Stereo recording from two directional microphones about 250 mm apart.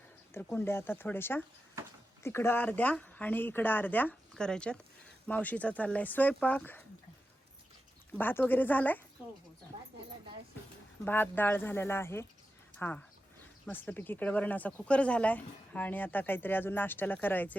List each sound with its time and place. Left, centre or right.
0.3 s speech: centre
8.2 s speech: centre
9.7 s speech: right
11.0 s speech: centre